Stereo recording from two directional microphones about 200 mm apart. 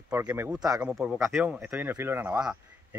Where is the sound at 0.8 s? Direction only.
5° right (ahead or behind).